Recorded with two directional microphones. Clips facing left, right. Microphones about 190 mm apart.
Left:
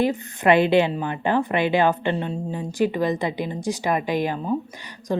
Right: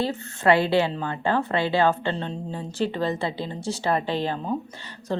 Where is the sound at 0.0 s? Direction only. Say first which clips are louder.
Left 3 dB; 15° left (ahead or behind).